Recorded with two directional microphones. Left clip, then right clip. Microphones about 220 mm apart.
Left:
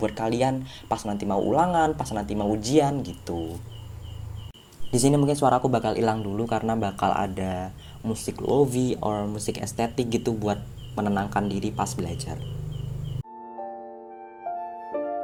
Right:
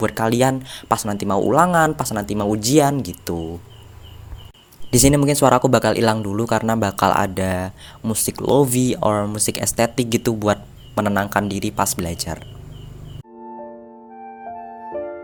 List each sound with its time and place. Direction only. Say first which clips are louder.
0.0 s speech: right 6 dB; 45° right (ahead or behind)
4.9 s speech: right 6 dB; 40° right (ahead or behind)